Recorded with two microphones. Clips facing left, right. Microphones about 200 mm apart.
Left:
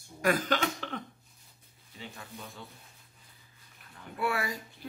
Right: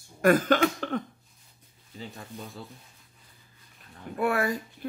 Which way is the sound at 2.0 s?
35° right (ahead or behind).